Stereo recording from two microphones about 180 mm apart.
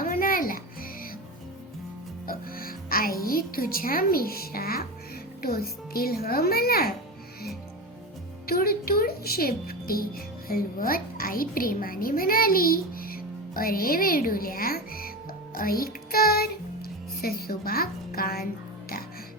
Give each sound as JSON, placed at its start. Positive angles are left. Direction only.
{"t": 0.0, "sound": "music", "side_deg": 50}
{"t": 2.2, "sound": "music", "side_deg": 55}
{"t": 5.4, "sound": "speech", "side_deg": 55}
{"t": 8.4, "sound": "speech", "side_deg": 55}